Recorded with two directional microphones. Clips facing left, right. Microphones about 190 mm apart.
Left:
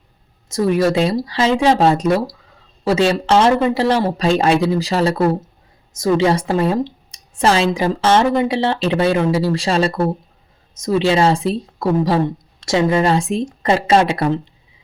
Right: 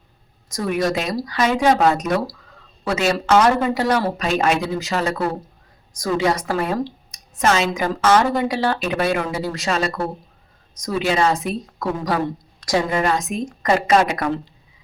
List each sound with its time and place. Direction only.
0.4 s a woman's voice: 30° left (ahead or behind)